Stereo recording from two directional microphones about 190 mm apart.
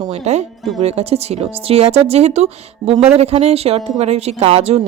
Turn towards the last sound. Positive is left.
turn(degrees=-35)  # may be behind; listen again after turning